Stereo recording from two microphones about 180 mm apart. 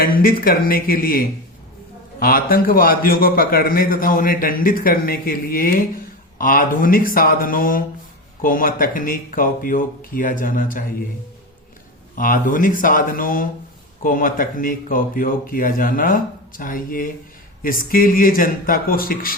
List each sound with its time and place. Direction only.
0.0 s a man's voice: 55° left (ahead or behind)
12.1 s a man's voice: 50° left (ahead or behind)